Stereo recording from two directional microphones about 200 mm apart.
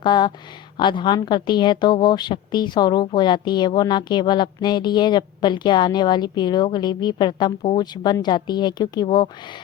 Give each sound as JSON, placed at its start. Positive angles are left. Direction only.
{"t": 0.0, "sound": "a woman's voice", "side_deg": 20}